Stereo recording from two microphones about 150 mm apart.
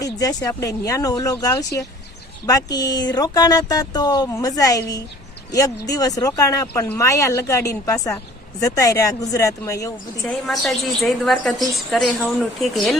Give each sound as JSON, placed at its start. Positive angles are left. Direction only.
{"t": 0.0, "sound": "speech", "side_deg": 25}
{"t": 10.2, "sound": "a woman's voice", "side_deg": 0}